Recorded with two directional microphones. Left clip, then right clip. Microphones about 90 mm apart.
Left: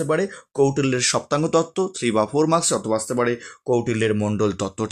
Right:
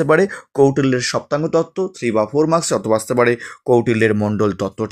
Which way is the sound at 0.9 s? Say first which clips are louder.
Right 2 dB; centre (ahead or behind).